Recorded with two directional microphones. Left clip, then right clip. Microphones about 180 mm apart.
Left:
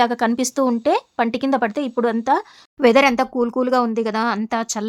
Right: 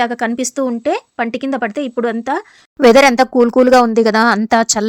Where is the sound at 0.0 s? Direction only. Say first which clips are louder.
Right 1 dB; 5° right (ahead or behind).